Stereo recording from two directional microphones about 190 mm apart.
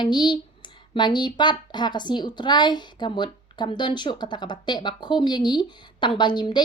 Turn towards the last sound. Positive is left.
turn(degrees=25)  # may be behind; listen again after turning